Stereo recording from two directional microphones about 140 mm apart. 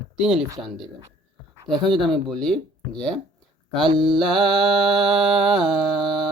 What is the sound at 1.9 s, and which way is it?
Speech, 35° right (ahead or behind).